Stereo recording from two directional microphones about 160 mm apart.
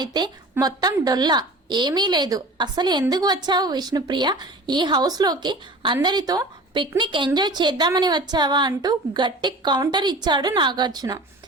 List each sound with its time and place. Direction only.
0.0 s a woman's voice: 25° right (ahead or behind)